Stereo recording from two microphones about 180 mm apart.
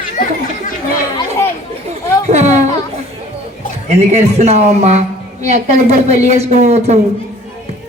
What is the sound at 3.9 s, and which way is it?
A woman's voice, 35° right (ahead or behind).